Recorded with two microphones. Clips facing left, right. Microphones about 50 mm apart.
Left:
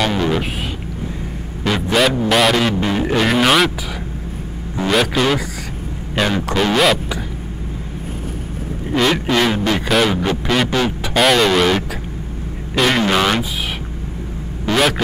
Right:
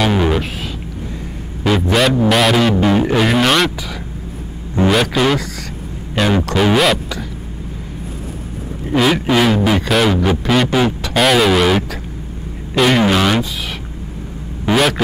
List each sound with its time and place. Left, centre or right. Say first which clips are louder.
0.0 s a sound: right 2 dB; centre
1.6 s music: right 2 dB; centre
4.8 s a man's voice: right 2 dB; centre
6.2 s music: right 2 dB; centre
8.9 s music: right 2 dB; centre
12.7 s speech: right 2 dB; centre
14.7 s hum: right 2 dB; centre